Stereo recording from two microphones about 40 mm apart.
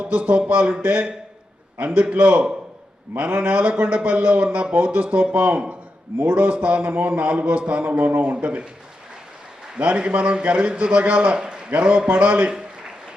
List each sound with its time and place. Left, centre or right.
0.0 s a man's voice: right
9.7 s a man's voice: right